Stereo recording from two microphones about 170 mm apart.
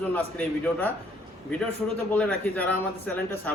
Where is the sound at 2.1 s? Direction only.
10° left (ahead or behind).